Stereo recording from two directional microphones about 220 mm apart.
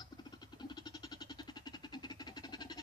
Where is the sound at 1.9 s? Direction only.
20° left (ahead or behind).